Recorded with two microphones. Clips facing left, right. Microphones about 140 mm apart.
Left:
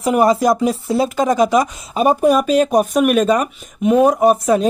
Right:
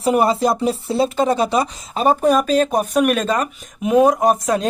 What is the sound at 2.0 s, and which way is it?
Speech, 10° left (ahead or behind).